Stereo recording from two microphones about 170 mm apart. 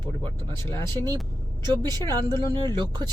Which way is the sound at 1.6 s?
25° right (ahead or behind).